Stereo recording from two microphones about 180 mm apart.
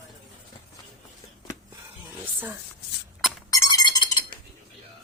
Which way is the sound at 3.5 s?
20° left (ahead or behind).